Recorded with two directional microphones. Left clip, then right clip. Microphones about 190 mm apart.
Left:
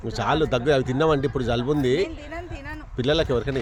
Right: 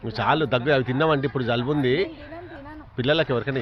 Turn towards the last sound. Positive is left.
turn(degrees=5)  # may be behind; listen again after turning